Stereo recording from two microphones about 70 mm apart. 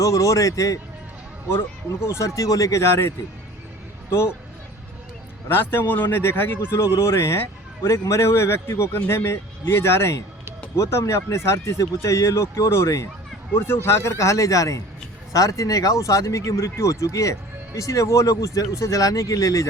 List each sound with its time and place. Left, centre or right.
0.0 s speech: left
1.5 s speech: left
4.1 s speech: left
5.5 s speech: left